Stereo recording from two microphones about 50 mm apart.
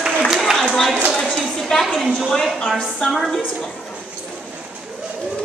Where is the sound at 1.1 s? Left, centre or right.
Centre.